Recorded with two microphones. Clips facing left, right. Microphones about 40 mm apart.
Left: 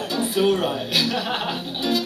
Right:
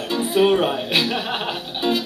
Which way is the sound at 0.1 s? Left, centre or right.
Right.